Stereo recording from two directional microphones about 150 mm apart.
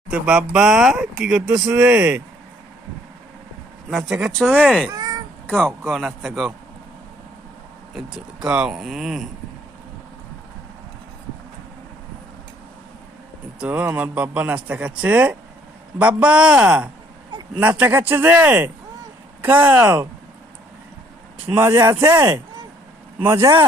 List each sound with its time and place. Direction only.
0.1 s a man's voice: 5° right (ahead or behind)
3.8 s speech: centre (ahead or behind)
4.9 s meow: 25° right (ahead or behind)
5.5 s speech: 5° left (ahead or behind)
7.9 s speech: 5° right (ahead or behind)
13.6 s a man's voice: 10° right (ahead or behind)
21.5 s speech: 15° right (ahead or behind)